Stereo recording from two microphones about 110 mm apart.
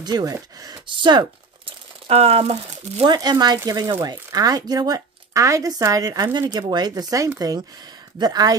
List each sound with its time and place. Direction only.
0.0 s speech: 35° right (ahead or behind)
0.8 s speech: 45° right (ahead or behind)
1.7 s crumpling: 60° right (ahead or behind)
3.0 s speech: 40° right (ahead or behind)